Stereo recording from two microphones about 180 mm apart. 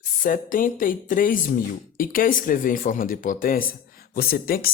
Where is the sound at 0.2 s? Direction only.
50° left (ahead or behind).